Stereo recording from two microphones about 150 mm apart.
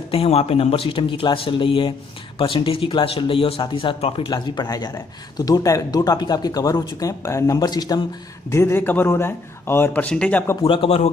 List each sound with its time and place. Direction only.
0.1 s speech: 40° left (ahead or behind); by 10.6 s 15° left (ahead or behind)
10.6 s speech: 40° left (ahead or behind)